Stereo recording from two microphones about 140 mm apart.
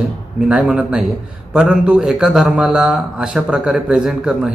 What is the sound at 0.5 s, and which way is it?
A man's voice, 10° right (ahead or behind).